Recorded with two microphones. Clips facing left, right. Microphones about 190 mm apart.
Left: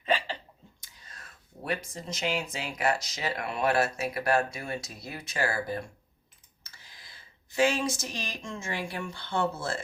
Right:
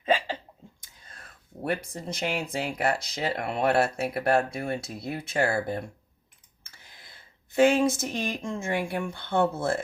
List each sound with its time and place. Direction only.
0.8 s speech: 50° right (ahead or behind)
5.5 s speech: 25° right (ahead or behind)
6.6 s a sound: 55° right (ahead or behind)
9.0 s speech: 55° right (ahead or behind)